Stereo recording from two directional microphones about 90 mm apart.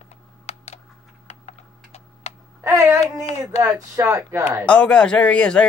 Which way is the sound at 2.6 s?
35° right (ahead or behind).